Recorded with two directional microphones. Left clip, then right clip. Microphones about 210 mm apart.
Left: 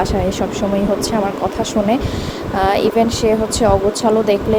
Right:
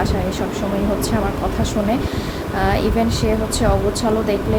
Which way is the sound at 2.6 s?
25° left (ahead or behind).